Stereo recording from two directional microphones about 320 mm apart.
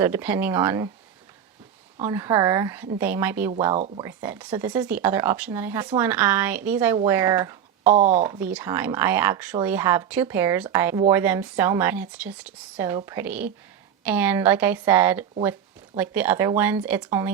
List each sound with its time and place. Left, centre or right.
0.0 s speech: centre
2.0 s speech: centre
3.7 s speech: centre
4.0 s speech: centre
7.9 s speech: right
8.1 s speech: centre